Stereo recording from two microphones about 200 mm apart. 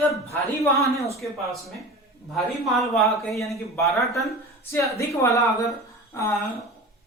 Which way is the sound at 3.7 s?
15° left (ahead or behind).